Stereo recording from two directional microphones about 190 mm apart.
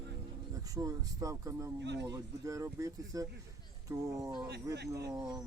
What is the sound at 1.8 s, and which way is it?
Speech, 65° right (ahead or behind).